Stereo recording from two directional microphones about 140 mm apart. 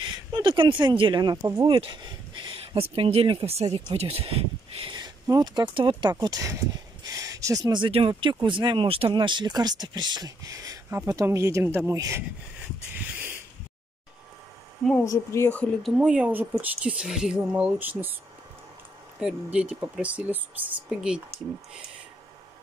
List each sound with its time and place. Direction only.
0.0 s speech: 35° right (ahead or behind)
4.9 s speech: 25° right (ahead or behind)
15.0 s speech: 20° left (ahead or behind)
15.8 s speech: 5° right (ahead or behind)
19.1 s speech: 5° right (ahead or behind)